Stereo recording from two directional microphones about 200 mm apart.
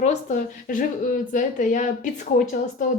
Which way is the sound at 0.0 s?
35° left (ahead or behind).